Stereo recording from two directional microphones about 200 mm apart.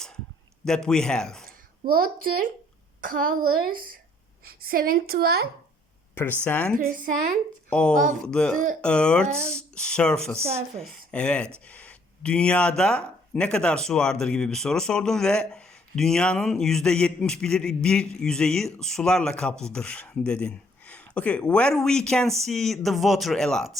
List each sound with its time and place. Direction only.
0.6 s speech: 5° left (ahead or behind)
1.5 s a child's voice: 45° right (ahead or behind)
4.4 s a woman's voice: 45° right (ahead or behind)
6.4 s a woman's voice: 5° left (ahead or behind)
6.9 s a woman's voice: 40° right (ahead or behind)
7.7 s speech: 5° left (ahead or behind)